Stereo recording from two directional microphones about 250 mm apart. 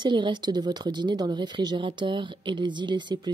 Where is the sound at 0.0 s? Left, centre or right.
Centre.